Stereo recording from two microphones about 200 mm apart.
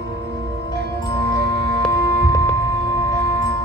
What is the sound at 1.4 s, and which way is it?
Music, 55° right (ahead or behind).